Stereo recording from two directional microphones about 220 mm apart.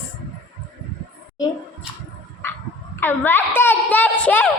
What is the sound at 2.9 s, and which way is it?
A woman's voice, 10° left (ahead or behind).